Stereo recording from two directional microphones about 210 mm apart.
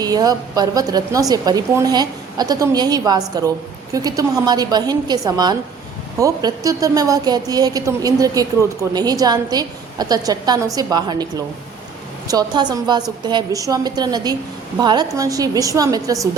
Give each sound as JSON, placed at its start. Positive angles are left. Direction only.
{"t": 0.0, "sound": "a woman's voice", "side_deg": -20}